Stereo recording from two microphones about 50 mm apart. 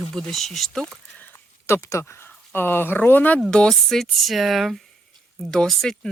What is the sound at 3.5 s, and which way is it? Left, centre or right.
Speech, centre.